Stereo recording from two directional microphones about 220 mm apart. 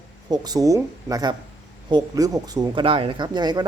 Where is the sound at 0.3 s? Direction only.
15° right (ahead or behind).